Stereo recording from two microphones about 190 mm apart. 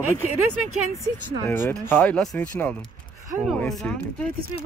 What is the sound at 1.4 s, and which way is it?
Speech, 10° left (ahead or behind).